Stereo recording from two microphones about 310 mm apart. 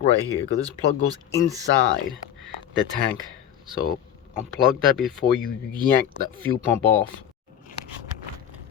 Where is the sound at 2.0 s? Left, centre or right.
Centre.